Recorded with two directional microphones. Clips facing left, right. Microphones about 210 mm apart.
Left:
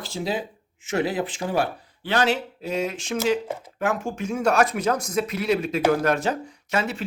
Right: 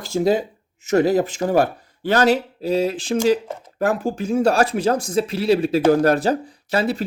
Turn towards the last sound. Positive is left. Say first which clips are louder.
# right 5 dB
turn(degrees=-35)  # may be behind; listen again after turning